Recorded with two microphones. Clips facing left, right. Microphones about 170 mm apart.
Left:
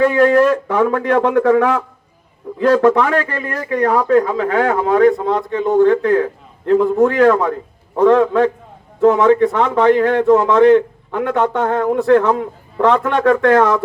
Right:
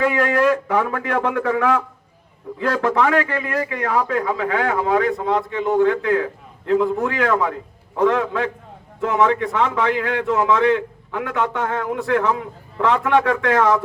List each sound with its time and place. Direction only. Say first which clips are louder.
0.0 s a man's voice: left 6 dB; 35° left (ahead or behind)